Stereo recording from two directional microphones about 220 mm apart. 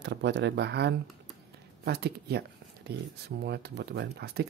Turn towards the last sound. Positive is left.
turn(degrees=-50)  # may be behind; listen again after turning